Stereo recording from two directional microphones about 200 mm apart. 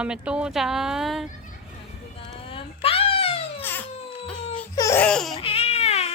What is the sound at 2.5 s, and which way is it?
Wail, 30° left (ahead or behind).